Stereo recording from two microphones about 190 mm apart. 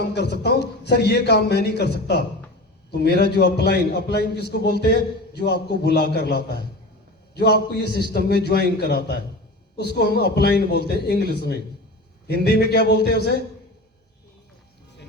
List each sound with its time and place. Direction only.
0.1 s a man's voice: 60° left (ahead or behind)